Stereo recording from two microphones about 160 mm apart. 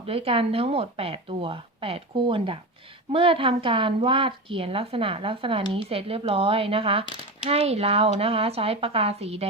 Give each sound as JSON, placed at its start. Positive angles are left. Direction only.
{"t": 0.0, "sound": "a woman's voice", "side_deg": -35}